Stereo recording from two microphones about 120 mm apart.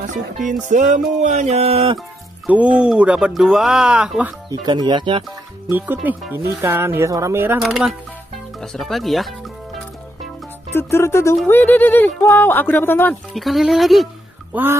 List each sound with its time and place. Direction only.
0.5 s music: 90° right
1.2 s music: 80° right; by 2.0 s 55° right (ahead or behind)
2.4 s speech: 10° right (ahead or behind)
4.5 s speech: 35° right (ahead or behind)
5.7 s speech: 15° right (ahead or behind)
7.6 s speech: 5° right (ahead or behind)
10.7 s speech: 20° left (ahead or behind)
13.3 s speech: centre (ahead or behind)
14.5 s speech: 20° right (ahead or behind)